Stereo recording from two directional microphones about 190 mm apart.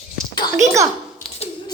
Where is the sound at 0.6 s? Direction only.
15° right (ahead or behind).